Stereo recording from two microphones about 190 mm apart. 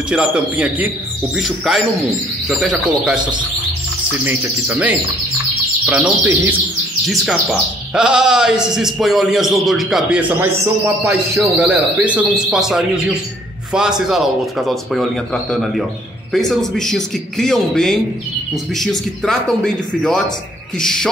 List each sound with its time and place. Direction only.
0.1 s a man's voice: 5° right (ahead or behind)
3.2 s speech: 25° right (ahead or behind)
4.2 s a man's voice: 10° right (ahead or behind)